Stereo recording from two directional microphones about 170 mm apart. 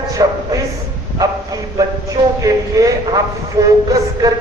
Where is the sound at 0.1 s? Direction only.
20° right (ahead or behind).